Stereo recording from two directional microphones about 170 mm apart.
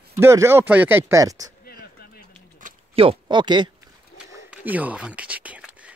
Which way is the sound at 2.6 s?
50° right (ahead or behind).